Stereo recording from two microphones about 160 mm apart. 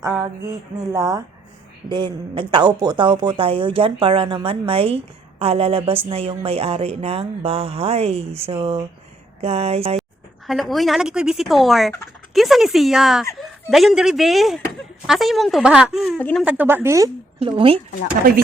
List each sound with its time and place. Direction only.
0.9 s speech: 20° right (ahead or behind); by 10.0 s 40° right (ahead or behind)
10.4 s speech: centre (ahead or behind)
16.1 s speech: 10° left (ahead or behind)
16.4 s a woman's voice: 10° right (ahead or behind)
17.4 s speech: 35° right (ahead or behind)